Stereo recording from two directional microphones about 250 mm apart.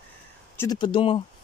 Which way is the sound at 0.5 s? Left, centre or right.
Centre.